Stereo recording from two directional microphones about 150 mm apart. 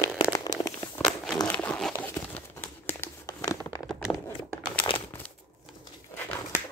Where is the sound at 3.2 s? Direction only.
20° left (ahead or behind).